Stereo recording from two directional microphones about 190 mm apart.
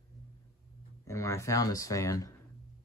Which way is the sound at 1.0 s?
15° left (ahead or behind).